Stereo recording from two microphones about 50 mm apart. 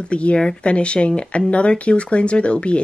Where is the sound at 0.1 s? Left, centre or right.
Left.